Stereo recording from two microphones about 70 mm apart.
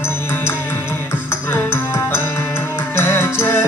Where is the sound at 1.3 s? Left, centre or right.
Left.